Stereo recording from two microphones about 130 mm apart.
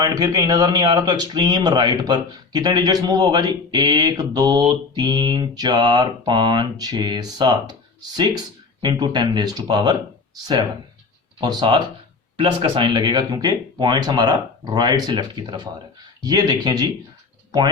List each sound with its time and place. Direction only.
0.0 s speech: 30° right (ahead or behind)